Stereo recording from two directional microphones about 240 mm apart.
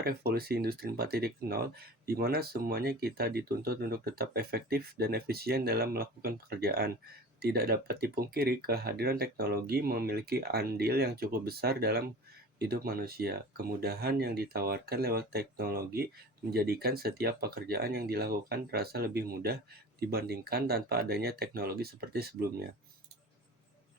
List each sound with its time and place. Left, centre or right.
0.0 s speech: right